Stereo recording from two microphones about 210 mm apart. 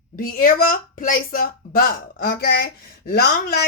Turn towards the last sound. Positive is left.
turn(degrees=50)  # may be behind; listen again after turning